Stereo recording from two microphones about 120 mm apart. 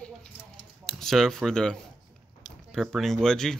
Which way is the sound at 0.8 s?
5° left (ahead or behind).